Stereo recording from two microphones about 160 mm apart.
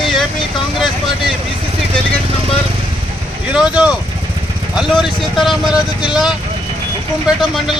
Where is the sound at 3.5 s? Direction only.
5° right (ahead or behind).